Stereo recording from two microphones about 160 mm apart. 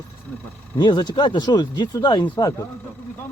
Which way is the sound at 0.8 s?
30° left (ahead or behind).